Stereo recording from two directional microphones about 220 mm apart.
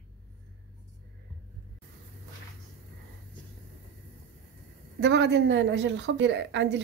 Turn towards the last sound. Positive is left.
turn(degrees=-55)  # may be behind; listen again after turning